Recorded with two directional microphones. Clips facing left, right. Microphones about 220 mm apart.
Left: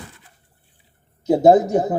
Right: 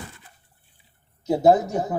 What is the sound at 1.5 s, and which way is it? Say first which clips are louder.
Speech: left 4 dB; 35° left (ahead or behind).